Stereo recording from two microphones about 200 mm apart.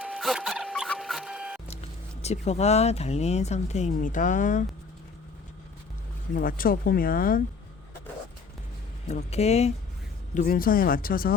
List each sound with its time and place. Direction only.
0.0 s printer: centre (ahead or behind)
2.2 s speech: 35° left (ahead or behind)
6.3 s speech: 45° left (ahead or behind)
9.0 s speech: 35° left (ahead or behind)
10.3 s speech: 45° left (ahead or behind)